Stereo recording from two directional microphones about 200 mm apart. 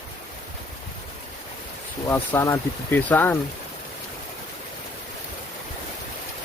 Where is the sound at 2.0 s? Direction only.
10° left (ahead or behind).